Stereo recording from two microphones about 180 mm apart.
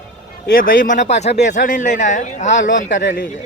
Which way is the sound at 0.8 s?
40° left (ahead or behind).